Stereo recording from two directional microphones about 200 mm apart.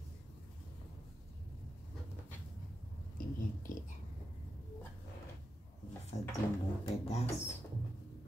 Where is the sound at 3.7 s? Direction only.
40° left (ahead or behind).